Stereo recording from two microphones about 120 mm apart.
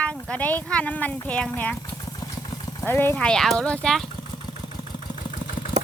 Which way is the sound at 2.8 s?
20° left (ahead or behind).